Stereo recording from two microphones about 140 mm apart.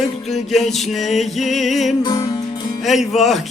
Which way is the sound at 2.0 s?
25° left (ahead or behind).